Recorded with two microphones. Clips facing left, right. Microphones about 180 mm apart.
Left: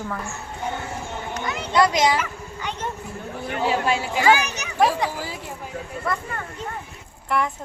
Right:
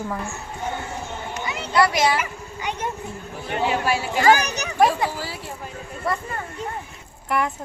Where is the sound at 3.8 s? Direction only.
20° left (ahead or behind).